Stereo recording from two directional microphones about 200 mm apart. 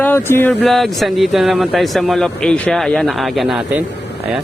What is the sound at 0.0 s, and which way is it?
Speech, 10° left (ahead or behind).